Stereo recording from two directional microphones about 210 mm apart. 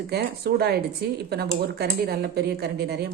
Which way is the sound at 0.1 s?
50° right (ahead or behind).